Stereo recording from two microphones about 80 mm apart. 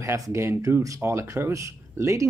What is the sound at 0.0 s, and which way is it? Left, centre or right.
Speech, right.